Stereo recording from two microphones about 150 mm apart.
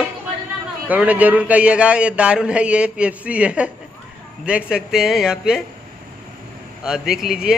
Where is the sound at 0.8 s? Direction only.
10° right (ahead or behind).